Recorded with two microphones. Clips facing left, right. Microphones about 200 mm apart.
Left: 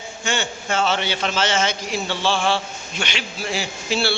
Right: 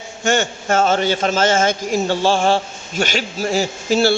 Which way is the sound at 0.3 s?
45° right (ahead or behind).